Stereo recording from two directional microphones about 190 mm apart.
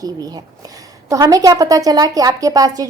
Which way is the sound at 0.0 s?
20° right (ahead or behind).